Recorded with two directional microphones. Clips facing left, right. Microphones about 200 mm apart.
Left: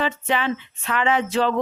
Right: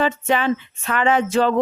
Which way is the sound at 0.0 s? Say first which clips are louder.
Right 4 dB; 45° right (ahead or behind).